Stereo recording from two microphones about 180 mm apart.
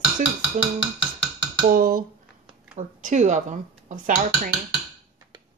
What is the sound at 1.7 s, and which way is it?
Speech, 55° right (ahead or behind).